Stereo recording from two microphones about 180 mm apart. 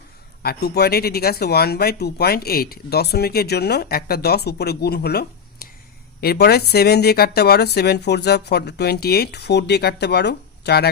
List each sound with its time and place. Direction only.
0.4 s speech: 65° left (ahead or behind)